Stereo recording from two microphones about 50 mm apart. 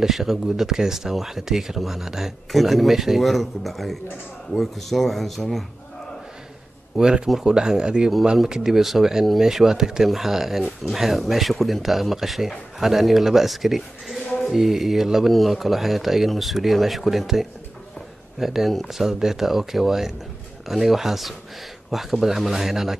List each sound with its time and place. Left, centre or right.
0.0 s speech: centre
7.0 s speech: centre